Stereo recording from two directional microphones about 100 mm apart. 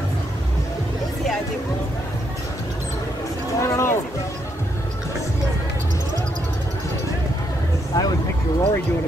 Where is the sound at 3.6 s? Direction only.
30° left (ahead or behind).